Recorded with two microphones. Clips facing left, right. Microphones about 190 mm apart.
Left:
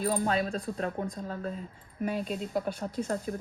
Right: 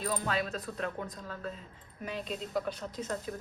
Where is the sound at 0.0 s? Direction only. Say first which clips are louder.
Left 5 dB; 45° left (ahead or behind).